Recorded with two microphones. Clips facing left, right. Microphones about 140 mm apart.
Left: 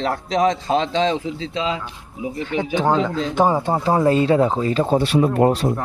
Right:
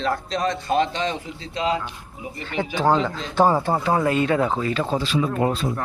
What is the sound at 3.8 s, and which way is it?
Speech, 30° left (ahead or behind).